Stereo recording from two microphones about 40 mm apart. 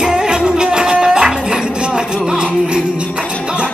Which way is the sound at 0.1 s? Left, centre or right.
Centre.